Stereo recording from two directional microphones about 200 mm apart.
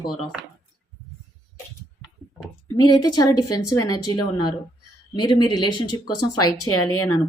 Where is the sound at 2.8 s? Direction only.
20° left (ahead or behind).